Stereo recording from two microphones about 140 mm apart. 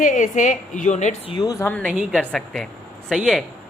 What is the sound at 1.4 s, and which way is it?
Speech, 25° left (ahead or behind).